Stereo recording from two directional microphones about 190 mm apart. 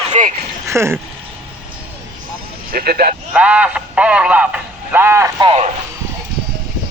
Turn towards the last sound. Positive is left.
turn(degrees=-30)  # may be behind; listen again after turning